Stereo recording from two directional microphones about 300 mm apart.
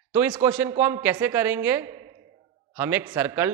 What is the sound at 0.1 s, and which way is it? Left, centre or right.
A woman's voice, centre.